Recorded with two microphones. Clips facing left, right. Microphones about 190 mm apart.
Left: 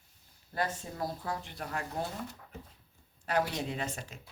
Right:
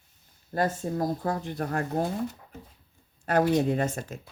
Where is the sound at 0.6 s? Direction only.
40° right (ahead or behind).